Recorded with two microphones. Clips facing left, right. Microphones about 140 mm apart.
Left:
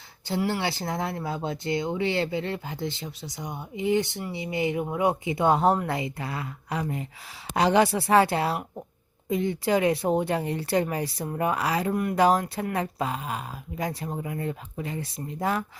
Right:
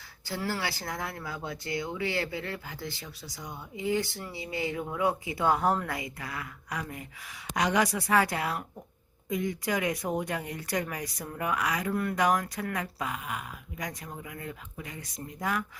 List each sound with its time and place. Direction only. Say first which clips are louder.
0.3 s speech: left 6 dB; 20° left (ahead or behind)